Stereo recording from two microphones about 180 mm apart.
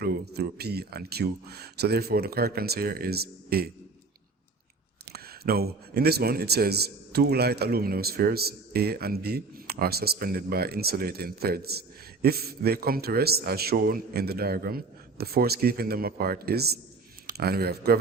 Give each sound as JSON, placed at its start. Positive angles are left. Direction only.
{"t": 0.0, "sound": "speech", "side_deg": -60}
{"t": 5.0, "sound": "speech", "side_deg": -60}